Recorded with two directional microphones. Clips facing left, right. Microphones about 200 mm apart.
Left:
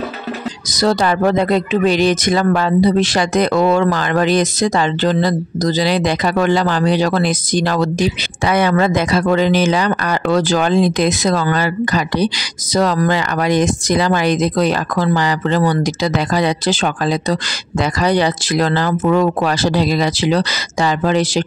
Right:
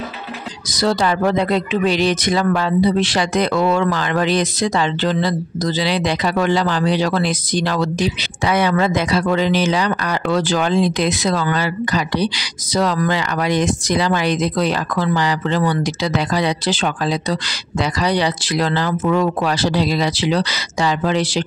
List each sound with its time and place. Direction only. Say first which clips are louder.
0.7 s speech: left 2 dB; 45° left (ahead or behind)